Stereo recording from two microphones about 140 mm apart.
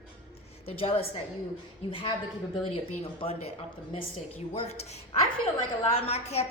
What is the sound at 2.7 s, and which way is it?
Speech, 45° left (ahead or behind).